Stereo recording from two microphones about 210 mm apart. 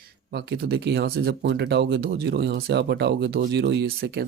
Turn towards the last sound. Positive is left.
turn(degrees=-50)  # may be behind; listen again after turning